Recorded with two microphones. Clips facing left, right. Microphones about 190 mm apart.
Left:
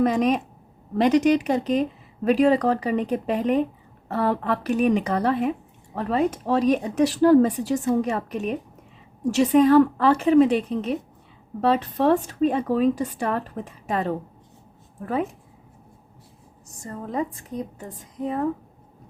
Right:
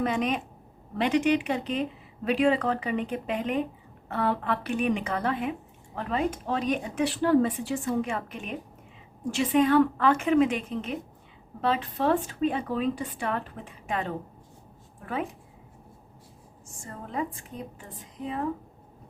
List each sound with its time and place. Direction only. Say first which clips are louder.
0.0 s speech: left 7 dB; 40° left (ahead or behind)
16.6 s speech: left 7 dB; 40° left (ahead or behind)